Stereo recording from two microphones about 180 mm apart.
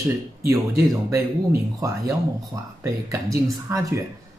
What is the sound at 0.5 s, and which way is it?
Speech, 15° right (ahead or behind).